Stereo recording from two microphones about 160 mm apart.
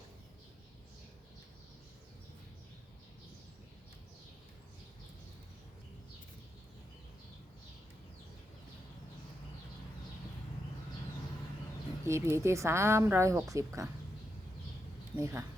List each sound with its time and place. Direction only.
12.0 s speech: 15° right (ahead or behind)
15.1 s speech: 20° right (ahead or behind)